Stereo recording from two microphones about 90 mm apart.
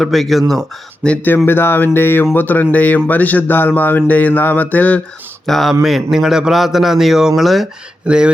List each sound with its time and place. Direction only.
0.0 s a man's voice: centre (ahead or behind)
1.0 s speech: 15° left (ahead or behind)
5.5 s a man's voice: centre (ahead or behind)